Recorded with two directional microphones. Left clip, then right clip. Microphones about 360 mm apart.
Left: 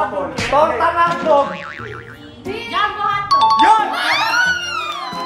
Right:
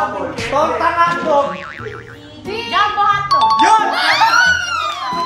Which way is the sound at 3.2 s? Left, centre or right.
Centre.